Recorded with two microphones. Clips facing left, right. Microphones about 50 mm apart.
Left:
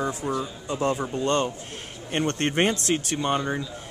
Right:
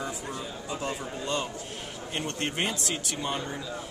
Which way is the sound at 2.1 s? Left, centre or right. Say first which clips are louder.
Left 8 dB; left.